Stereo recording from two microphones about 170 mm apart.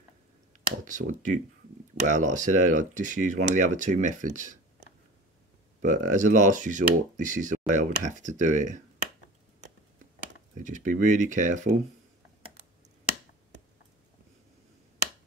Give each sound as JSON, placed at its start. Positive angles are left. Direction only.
{"t": 0.8, "sound": "speech", "side_deg": -50}
{"t": 5.9, "sound": "speech", "side_deg": -45}
{"t": 10.6, "sound": "speech", "side_deg": -50}